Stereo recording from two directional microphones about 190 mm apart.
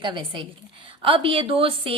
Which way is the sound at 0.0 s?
25° right (ahead or behind).